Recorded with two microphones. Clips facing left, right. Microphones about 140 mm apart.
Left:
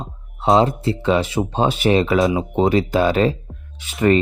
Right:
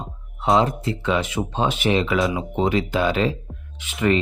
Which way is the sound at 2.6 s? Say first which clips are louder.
Left 4 dB; 35° left (ahead or behind).